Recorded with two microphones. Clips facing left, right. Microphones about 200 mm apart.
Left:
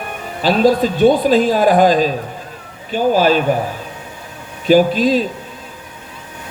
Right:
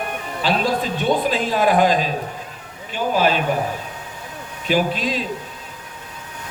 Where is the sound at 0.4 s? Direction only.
40° left (ahead or behind).